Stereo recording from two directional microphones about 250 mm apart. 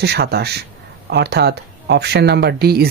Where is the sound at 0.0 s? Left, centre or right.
Right.